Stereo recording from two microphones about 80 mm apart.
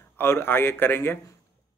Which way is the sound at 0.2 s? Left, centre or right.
Left.